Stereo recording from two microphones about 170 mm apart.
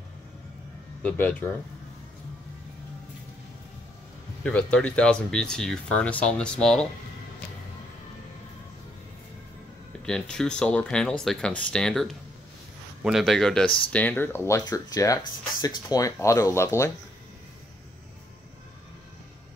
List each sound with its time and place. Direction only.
1.0 s speech: 10° left (ahead or behind)
4.4 s speech: 5° left (ahead or behind)
10.0 s speech: 5° left (ahead or behind)